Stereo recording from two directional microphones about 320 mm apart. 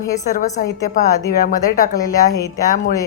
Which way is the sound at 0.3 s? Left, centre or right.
Left.